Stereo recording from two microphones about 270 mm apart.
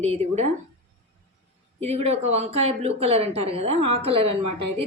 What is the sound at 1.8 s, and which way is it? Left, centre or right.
Speech, right.